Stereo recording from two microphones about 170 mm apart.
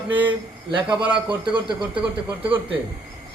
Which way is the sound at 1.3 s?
30° right (ahead or behind).